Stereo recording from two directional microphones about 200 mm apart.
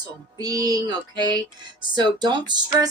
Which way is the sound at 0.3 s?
20° right (ahead or behind).